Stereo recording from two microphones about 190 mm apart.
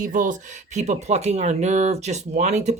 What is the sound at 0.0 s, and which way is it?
Speech, 45° right (ahead or behind).